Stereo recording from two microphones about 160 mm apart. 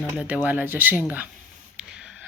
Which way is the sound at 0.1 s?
10° right (ahead or behind).